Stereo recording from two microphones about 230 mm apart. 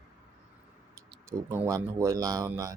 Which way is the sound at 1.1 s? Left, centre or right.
Centre.